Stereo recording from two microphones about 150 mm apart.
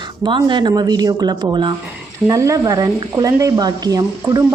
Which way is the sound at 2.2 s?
20° right (ahead or behind).